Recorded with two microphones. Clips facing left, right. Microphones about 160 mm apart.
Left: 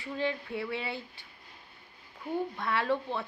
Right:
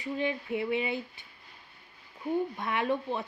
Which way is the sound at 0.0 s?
15° right (ahead or behind).